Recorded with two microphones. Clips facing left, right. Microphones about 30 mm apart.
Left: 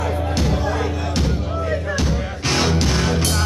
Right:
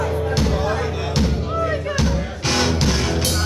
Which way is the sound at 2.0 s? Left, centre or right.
Centre.